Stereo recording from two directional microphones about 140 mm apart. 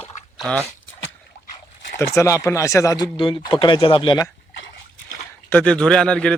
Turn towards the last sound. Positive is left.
turn(degrees=5)  # may be behind; listen again after turning